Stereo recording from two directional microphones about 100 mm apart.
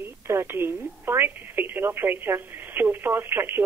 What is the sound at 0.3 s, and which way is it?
Speech, 25° right (ahead or behind).